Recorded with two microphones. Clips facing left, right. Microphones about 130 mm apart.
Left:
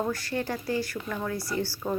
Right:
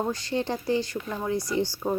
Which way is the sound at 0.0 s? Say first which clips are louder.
Right 2 dB; 20° right (ahead or behind).